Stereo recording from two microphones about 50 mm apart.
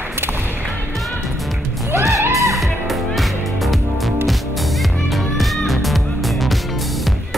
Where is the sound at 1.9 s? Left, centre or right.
Right.